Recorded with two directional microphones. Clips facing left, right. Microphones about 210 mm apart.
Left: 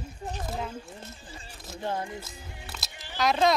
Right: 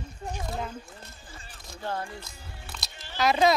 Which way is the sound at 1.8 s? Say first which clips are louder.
Left 2 dB; 20° left (ahead or behind).